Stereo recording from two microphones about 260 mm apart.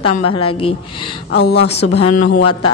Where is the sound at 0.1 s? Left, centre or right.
Left.